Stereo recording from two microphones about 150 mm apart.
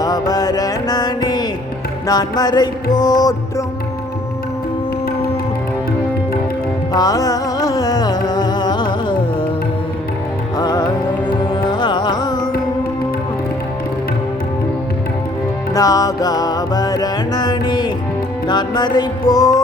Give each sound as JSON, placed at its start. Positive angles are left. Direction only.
{"t": 0.0, "sound": "music", "side_deg": 25}
{"t": 6.9, "sound": "music", "side_deg": 25}
{"t": 10.6, "sound": "music", "side_deg": 25}
{"t": 15.7, "sound": "music", "side_deg": 25}